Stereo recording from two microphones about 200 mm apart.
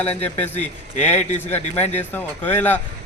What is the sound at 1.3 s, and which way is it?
A man's voice, 10° left (ahead or behind).